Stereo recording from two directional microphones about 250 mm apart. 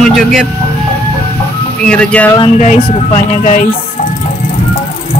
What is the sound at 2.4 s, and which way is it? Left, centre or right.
Speech, left.